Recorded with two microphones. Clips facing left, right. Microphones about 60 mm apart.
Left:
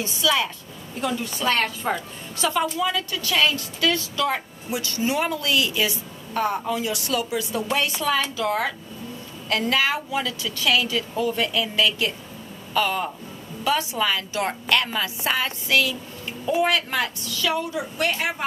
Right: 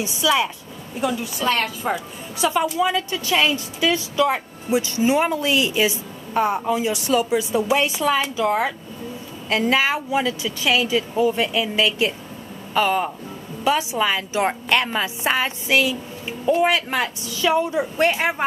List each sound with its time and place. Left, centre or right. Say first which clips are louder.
0.0 s a woman's voice: right 3 dB; centre
7.6 s a woman's voice: right 4 dB; centre; by 18.1 s right